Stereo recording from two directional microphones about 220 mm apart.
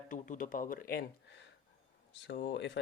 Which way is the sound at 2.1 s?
55° left (ahead or behind).